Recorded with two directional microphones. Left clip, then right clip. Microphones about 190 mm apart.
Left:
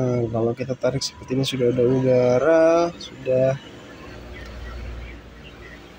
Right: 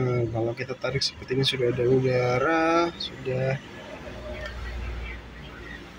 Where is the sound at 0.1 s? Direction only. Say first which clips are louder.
Left 5 dB; 15° left (ahead or behind).